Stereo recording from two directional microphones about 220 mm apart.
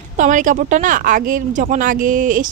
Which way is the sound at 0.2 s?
35° right (ahead or behind).